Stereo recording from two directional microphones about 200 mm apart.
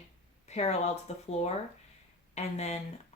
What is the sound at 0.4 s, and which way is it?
Speech, 35° left (ahead or behind).